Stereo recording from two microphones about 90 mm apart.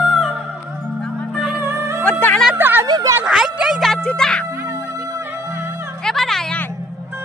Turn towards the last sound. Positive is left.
turn(degrees=5)  # may be behind; listen again after turning